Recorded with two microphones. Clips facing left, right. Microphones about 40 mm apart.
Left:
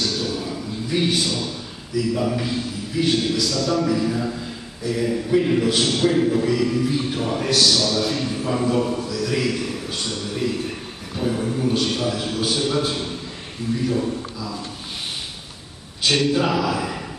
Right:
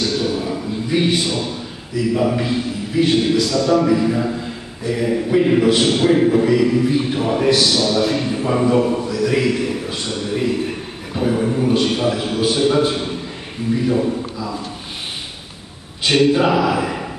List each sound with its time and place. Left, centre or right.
0.0 s a man's voice: centre
16.0 s a man's voice: centre